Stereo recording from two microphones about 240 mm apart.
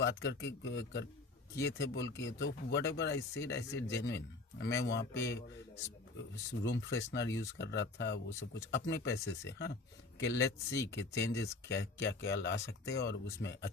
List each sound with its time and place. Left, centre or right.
0.0 s speech: left
6.6 s speech: left